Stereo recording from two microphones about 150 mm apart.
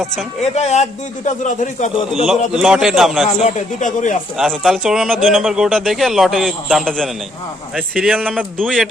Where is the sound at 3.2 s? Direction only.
55° left (ahead or behind).